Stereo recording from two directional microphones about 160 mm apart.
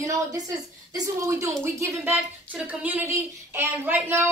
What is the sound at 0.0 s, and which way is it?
A woman's voice, 20° right (ahead or behind).